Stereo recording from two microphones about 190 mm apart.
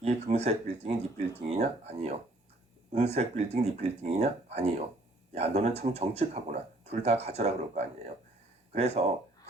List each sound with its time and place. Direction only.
0.0 s speech: 35° right (ahead or behind)